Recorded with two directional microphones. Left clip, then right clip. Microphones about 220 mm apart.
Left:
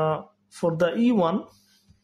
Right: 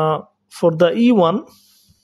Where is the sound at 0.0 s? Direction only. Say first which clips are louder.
Right 7 dB; 35° right (ahead or behind).